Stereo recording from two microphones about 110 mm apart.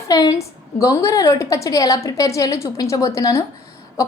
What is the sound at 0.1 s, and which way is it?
A woman's voice, 35° left (ahead or behind).